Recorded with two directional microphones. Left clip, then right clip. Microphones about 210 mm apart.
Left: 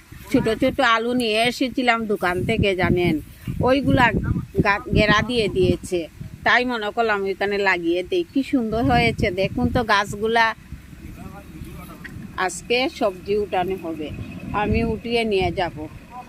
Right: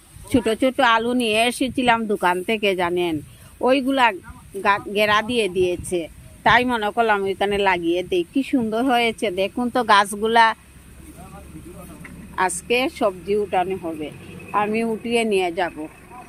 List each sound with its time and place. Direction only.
0.3 s speech: centre (ahead or behind)
12.4 s speech: centre (ahead or behind)